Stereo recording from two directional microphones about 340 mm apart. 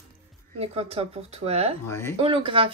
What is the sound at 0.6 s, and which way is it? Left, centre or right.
Speech, centre.